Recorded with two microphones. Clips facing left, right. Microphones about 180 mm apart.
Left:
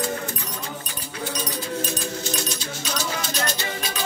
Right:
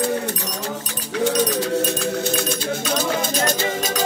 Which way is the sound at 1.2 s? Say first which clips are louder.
Right 11 dB; 80° right.